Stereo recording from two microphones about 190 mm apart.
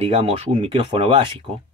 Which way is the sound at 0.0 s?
30° right (ahead or behind).